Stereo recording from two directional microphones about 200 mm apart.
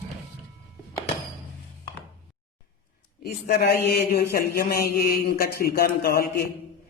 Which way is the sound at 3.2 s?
50° left (ahead or behind).